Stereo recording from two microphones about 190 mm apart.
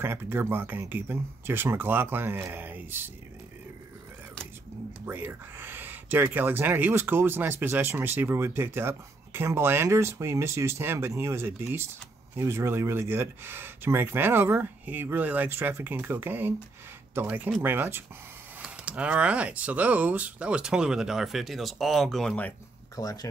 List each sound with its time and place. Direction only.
0.0 s speech: 10° right (ahead or behind)
5.0 s speech: 10° right (ahead or behind); by 22.5 s 5° left (ahead or behind)
23.0 s speech: 20° left (ahead or behind)